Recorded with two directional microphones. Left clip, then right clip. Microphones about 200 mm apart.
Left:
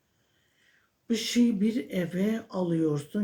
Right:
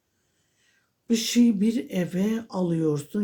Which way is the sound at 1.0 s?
45° right (ahead or behind).